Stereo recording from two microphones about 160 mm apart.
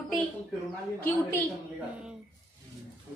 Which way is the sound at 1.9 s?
5° right (ahead or behind).